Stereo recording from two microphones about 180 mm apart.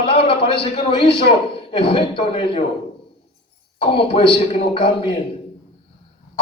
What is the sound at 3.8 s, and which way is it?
Speech, 30° left (ahead or behind).